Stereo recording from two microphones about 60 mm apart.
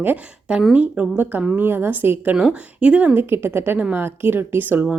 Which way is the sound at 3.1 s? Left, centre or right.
Right.